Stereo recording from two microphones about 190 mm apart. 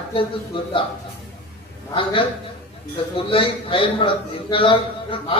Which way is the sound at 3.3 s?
30° left (ahead or behind).